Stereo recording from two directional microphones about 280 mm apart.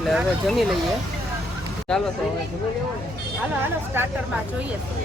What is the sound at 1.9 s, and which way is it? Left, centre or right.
Speech, centre.